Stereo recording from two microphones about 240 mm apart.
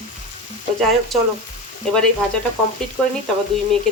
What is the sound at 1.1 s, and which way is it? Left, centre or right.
Speech, centre.